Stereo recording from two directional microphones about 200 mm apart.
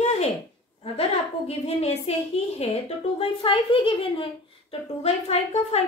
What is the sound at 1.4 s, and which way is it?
A woman's voice, 30° left (ahead or behind).